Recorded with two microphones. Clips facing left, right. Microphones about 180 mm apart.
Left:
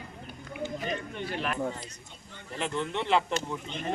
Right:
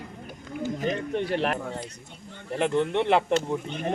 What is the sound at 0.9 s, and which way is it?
Speech, 75° right (ahead or behind).